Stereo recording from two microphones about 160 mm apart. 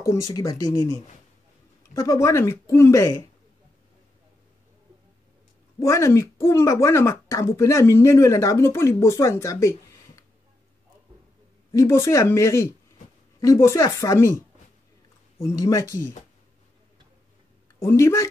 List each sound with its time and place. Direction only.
0.0 s speech: 20° left (ahead or behind)
5.8 s speech: 20° left (ahead or behind)
11.7 s speech: 20° left (ahead or behind)
15.4 s speech: 20° left (ahead or behind)
17.7 s speech: 15° left (ahead or behind)